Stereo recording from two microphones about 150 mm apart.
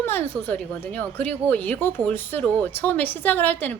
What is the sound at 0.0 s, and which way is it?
A woman's voice, 15° left (ahead or behind).